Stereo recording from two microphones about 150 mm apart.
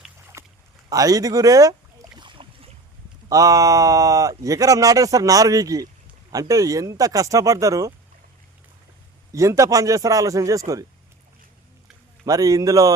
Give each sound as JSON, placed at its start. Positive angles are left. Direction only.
{"t": 0.3, "sound": "rowboat", "side_deg": -20}
{"t": 0.9, "sound": "boat", "side_deg": -25}
{"t": 3.2, "sound": "speech", "side_deg": -20}
{"t": 9.3, "sound": "speech", "side_deg": -20}
{"t": 12.2, "sound": "speech", "side_deg": -25}